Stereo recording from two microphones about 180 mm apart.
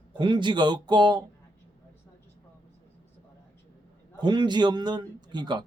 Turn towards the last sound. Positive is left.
turn(degrees=-25)  # may be behind; listen again after turning